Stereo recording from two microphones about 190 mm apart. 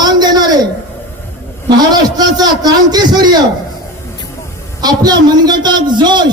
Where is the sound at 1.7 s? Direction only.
20° right (ahead or behind).